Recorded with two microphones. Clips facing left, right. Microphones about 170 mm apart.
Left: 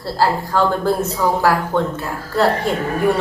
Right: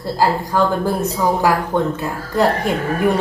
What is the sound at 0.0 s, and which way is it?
Speech, 15° right (ahead or behind).